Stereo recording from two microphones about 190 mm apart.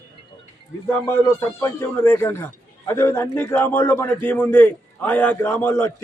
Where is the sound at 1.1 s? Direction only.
15° left (ahead or behind).